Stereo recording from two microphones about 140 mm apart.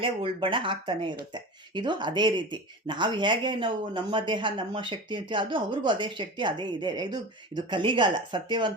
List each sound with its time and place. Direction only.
0.0 s speech: 40° right (ahead or behind)